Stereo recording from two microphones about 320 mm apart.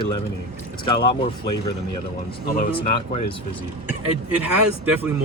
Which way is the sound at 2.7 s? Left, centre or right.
Centre.